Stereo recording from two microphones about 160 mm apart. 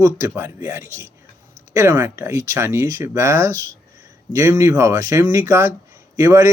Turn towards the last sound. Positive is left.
turn(degrees=-20)  # may be behind; listen again after turning